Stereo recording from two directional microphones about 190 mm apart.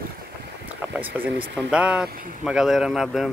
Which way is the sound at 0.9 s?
10° right (ahead or behind).